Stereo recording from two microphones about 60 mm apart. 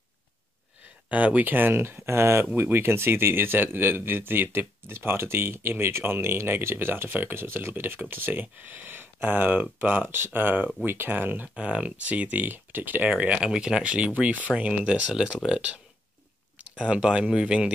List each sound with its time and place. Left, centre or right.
1.0 s speech: right
11.4 s speech: centre
13.8 s speech: right
16.8 s speech: centre